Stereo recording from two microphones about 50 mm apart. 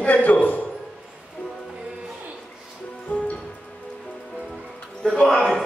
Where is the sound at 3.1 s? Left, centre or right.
Left.